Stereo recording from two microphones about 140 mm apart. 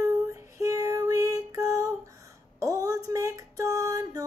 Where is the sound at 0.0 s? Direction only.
20° right (ahead or behind).